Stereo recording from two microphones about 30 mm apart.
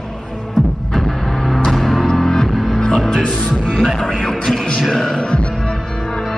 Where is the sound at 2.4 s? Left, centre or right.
Centre.